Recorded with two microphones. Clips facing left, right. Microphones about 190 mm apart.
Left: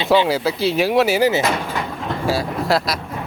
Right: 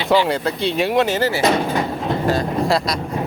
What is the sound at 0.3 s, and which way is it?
Speech, 5° left (ahead or behind).